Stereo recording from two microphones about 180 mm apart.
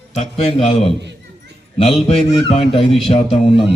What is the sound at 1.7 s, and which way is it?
A man's voice, 35° left (ahead or behind).